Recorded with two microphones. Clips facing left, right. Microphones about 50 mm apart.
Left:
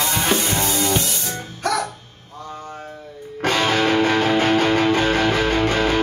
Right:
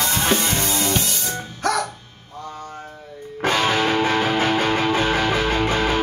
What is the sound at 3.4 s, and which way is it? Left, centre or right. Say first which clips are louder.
Music: left 1 dB; centre.